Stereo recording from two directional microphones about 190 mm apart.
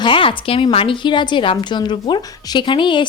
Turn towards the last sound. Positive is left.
turn(degrees=25)  # may be behind; listen again after turning